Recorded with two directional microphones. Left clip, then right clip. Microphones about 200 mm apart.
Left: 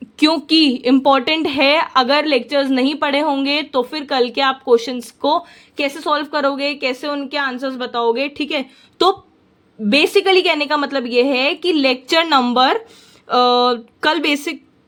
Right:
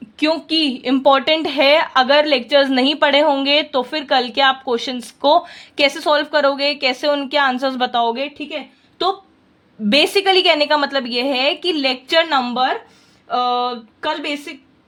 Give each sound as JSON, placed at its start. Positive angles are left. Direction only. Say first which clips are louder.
{"t": 0.2, "sound": "a woman's voice", "louder": "left 3 dB", "side_deg": 20}
{"t": 8.4, "sound": "a woman's voice", "louder": "left 6 dB", "side_deg": 25}
{"t": 9.9, "sound": "a woman's voice", "louder": "left 1 dB", "side_deg": 5}